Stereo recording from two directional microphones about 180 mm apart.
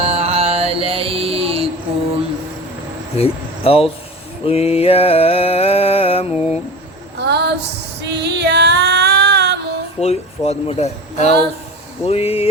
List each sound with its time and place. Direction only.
0.0 s music: 35° right (ahead or behind)
3.2 s speech: 30° left (ahead or behind)
4.4 s mantra: 35° left (ahead or behind)
6.3 s a sound: 5° right (ahead or behind)
7.2 s a sound: 70° right (ahead or behind)
8.1 s female singing: 70° right (ahead or behind)
10.0 s speech: 35° left (ahead or behind)